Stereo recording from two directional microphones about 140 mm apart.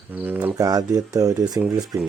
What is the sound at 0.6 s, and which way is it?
Speech, 25° right (ahead or behind).